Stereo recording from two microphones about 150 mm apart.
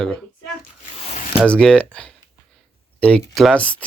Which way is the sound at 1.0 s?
50° left (ahead or behind).